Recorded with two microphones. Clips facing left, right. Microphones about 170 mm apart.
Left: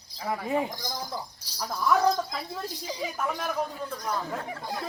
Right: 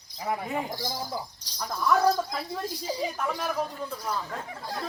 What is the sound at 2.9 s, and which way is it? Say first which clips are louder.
Speech: right 4 dB; 35° right (ahead or behind).